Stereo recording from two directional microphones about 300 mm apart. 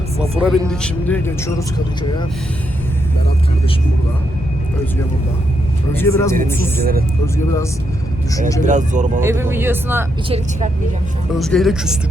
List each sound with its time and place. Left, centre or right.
0.2 s speech: centre
5.9 s speech: centre
6.6 s speech: right
7.3 s speech: centre
8.6 s speech: right
9.2 s speech: centre
10.2 s speech: centre
11.3 s speech: centre